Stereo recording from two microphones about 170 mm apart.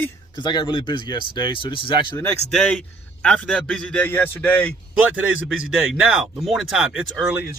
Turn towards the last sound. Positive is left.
turn(degrees=-5)  # may be behind; listen again after turning